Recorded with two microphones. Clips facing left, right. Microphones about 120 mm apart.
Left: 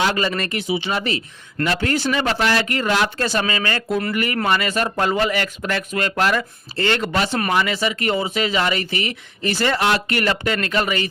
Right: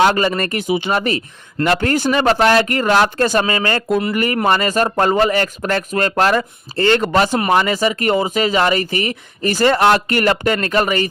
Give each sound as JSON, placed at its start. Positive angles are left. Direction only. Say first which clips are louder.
{"t": 0.0, "sound": "speech", "louder": "right 6 dB", "side_deg": -45}